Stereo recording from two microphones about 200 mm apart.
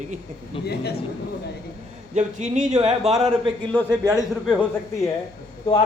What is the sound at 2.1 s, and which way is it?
Speech, 35° right (ahead or behind).